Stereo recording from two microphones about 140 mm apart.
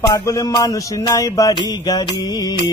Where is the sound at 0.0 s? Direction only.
25° left (ahead or behind).